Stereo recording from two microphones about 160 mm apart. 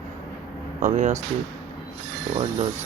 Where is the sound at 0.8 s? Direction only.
50° right (ahead or behind).